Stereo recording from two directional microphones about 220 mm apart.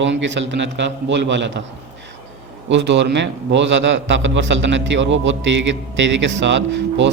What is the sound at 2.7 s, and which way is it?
A man's voice, 55° right (ahead or behind).